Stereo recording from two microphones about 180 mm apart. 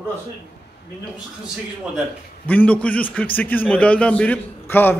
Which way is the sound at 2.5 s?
10° left (ahead or behind).